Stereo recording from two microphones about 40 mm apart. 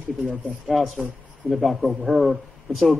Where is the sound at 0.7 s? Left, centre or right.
Centre.